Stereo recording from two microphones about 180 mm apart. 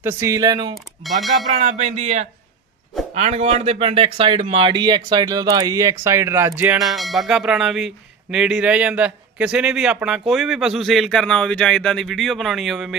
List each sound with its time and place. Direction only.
0.0 s speech: 15° right (ahead or behind)
1.0 s speech: centre (ahead or behind)
1.5 s music: 40° right (ahead or behind)
3.2 s speech: 35° right (ahead or behind); by 6.8 s 15° right (ahead or behind)
6.9 s speech: centre (ahead or behind)